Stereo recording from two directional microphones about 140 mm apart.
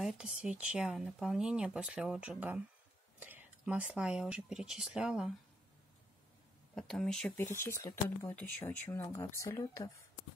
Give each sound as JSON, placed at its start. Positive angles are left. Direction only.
{"t": 0.0, "sound": "speech", "side_deg": -5}
{"t": 6.7, "sound": "speech", "side_deg": 5}
{"t": 7.5, "sound": "speech", "side_deg": 20}